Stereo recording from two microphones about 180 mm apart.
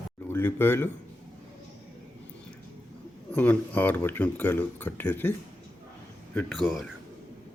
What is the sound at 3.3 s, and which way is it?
Speech, 10° left (ahead or behind).